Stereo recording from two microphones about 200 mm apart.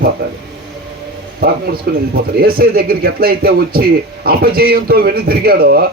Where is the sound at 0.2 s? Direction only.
55° right (ahead or behind).